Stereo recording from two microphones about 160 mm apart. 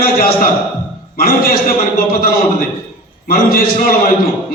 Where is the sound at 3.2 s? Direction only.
65° left (ahead or behind).